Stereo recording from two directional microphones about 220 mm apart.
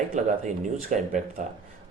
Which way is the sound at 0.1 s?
35° right (ahead or behind).